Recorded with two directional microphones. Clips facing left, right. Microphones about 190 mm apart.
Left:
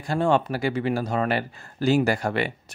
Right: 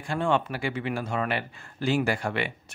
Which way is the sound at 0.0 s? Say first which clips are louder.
Left 4 dB; 40° left (ahead or behind).